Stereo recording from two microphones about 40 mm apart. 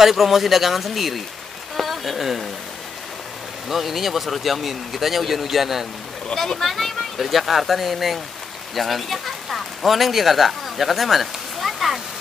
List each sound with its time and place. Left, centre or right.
0.0 s speech: centre
3.6 s speech: centre
6.3 s speech: centre